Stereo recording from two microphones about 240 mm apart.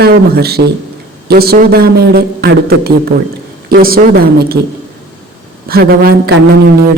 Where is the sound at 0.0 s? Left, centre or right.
Right.